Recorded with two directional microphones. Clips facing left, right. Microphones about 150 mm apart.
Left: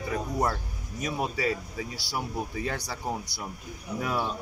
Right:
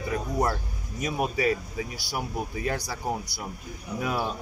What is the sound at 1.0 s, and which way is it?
Speech, 15° right (ahead or behind).